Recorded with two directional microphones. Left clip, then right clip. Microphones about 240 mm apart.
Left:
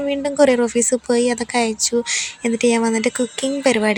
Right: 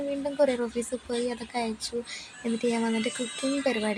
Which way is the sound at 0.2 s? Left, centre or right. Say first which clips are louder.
Left 11 dB; left.